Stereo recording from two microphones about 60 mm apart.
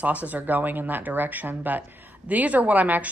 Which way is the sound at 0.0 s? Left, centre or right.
Right.